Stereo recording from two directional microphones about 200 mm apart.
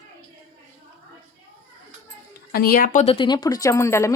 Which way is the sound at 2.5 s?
50° left (ahead or behind).